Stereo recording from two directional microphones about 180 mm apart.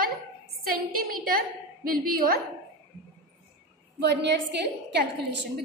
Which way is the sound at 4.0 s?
70° right (ahead or behind).